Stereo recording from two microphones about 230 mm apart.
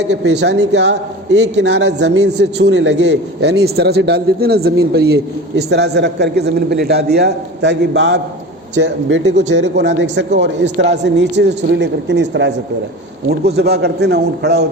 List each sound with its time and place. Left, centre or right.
0.0 s a man's voice: right